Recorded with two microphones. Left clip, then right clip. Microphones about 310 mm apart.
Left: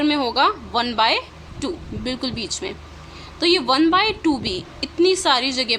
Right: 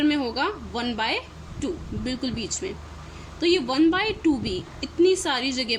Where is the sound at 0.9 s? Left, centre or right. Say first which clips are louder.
Left 7 dB; left.